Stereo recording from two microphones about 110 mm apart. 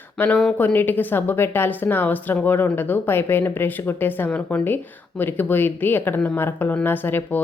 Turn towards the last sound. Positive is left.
turn(degrees=20)  # may be behind; listen again after turning